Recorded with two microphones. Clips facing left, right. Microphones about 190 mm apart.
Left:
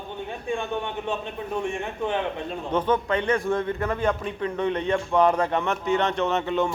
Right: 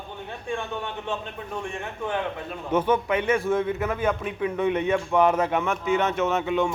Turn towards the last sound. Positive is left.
turn(degrees=0)  # may be behind; listen again after turning